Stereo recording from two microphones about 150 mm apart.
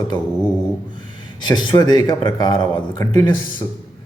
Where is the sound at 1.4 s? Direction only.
30° left (ahead or behind).